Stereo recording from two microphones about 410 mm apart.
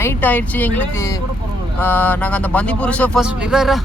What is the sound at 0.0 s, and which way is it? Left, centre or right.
Speech, centre.